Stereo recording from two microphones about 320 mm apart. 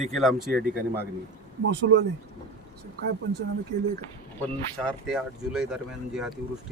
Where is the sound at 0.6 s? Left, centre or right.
Right.